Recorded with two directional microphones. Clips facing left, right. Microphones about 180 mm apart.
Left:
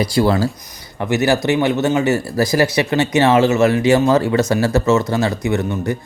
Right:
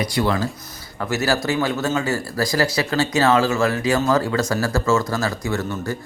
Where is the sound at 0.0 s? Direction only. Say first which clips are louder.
Left 5 dB; 30° left (ahead or behind).